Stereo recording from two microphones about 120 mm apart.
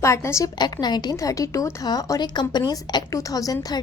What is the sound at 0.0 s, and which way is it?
A woman's voice, 25° left (ahead or behind).